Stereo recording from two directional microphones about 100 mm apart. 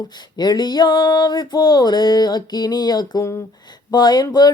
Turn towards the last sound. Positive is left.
turn(degrees=45)  # may be behind; listen again after turning